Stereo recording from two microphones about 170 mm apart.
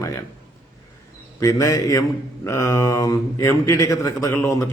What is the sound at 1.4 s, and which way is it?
A man's voice, 20° left (ahead or behind).